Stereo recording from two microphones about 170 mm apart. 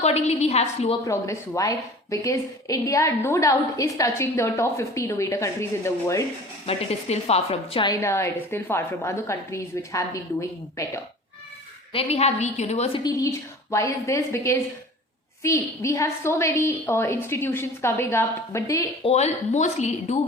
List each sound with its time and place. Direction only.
0.0 s a woman's voice: 40° left (ahead or behind)
1.0 s a woman's voice: 20° left (ahead or behind)
6.7 s a woman's voice: 35° left (ahead or behind)
7.9 s a woman's voice: 15° left (ahead or behind)
11.9 s a woman's voice: 40° left (ahead or behind)
13.0 s a woman's voice: 20° left (ahead or behind)
19.0 s a woman's voice: 40° left (ahead or behind)